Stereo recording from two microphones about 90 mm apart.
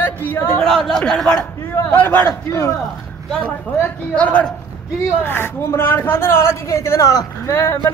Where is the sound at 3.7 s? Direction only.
15° left (ahead or behind).